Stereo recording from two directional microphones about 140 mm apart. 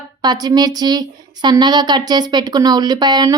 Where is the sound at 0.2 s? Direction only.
30° right (ahead or behind).